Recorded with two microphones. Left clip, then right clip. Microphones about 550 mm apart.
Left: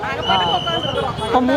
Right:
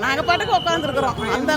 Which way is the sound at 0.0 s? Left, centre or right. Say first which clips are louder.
Left 1 dB; right.